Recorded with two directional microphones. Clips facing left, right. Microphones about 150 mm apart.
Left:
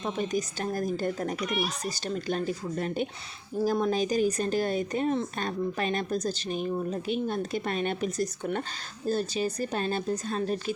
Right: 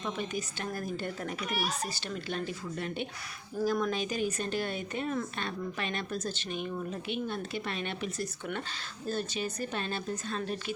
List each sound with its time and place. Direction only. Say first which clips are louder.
0.0 s speech: left 6 dB; 40° left (ahead or behind)